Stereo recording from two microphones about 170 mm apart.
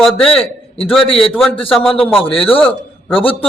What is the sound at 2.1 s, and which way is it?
A man's voice, 30° left (ahead or behind).